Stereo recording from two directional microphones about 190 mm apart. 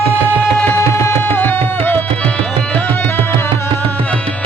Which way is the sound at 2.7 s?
10° left (ahead or behind).